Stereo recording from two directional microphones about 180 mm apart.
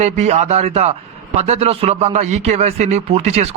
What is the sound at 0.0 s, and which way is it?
A man's voice, 40° right (ahead or behind).